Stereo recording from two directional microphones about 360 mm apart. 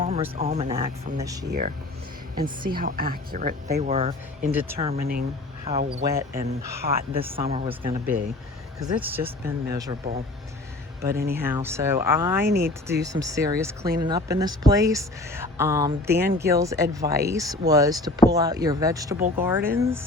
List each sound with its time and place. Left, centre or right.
0.0 s speech: centre
1.5 s speech: right
6.1 s speech: centre
11.3 s speech: centre